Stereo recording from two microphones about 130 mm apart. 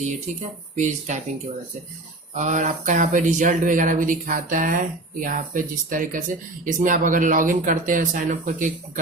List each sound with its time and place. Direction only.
0.8 s speech: 65° right (ahead or behind)
2.3 s speech: 70° right (ahead or behind)